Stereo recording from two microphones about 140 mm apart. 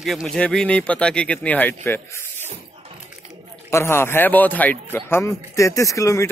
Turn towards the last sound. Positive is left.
turn(degrees=20)  # may be behind; listen again after turning